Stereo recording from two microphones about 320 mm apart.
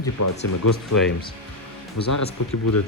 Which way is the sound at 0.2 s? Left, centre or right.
Left.